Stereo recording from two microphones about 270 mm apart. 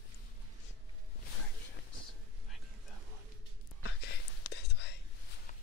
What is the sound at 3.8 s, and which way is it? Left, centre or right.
Whispering, left.